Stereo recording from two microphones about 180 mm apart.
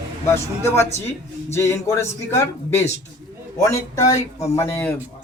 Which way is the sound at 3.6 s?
20° left (ahead or behind).